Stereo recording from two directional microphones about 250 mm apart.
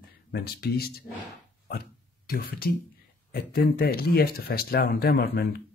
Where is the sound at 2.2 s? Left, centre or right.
Left.